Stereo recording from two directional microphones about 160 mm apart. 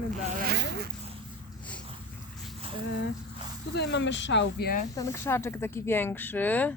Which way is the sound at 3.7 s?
90° left.